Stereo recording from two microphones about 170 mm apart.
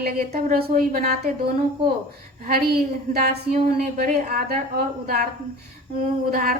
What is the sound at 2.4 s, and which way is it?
Speech, 60° right (ahead or behind).